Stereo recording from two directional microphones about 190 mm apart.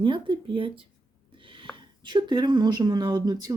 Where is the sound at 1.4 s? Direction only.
25° right (ahead or behind).